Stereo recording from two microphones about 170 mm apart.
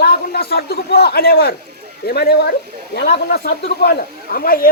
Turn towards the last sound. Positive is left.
turn(degrees=60)  # may be behind; listen again after turning